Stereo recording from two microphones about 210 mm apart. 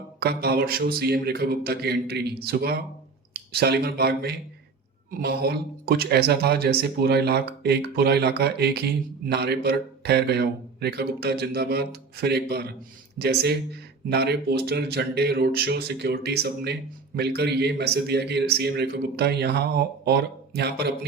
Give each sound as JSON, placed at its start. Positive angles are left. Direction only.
{"t": 0.2, "sound": "speech", "side_deg": -50}